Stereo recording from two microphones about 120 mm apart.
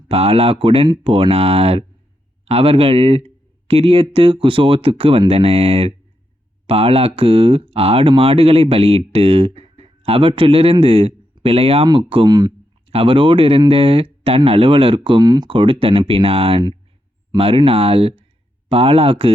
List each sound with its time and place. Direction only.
0.1 s speech: 55° right (ahead or behind)
12.3 s speech: 35° right (ahead or behind)
12.9 s speech: 50° right (ahead or behind)